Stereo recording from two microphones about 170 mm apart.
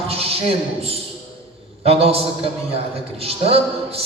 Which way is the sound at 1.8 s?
35° right (ahead or behind).